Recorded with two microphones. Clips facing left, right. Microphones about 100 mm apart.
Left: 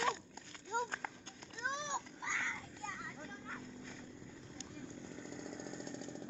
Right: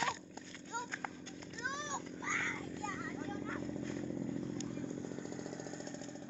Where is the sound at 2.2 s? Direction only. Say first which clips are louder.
Right 2 dB; 10° left (ahead or behind).